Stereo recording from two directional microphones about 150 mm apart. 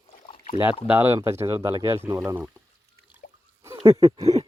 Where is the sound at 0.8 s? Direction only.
15° right (ahead or behind).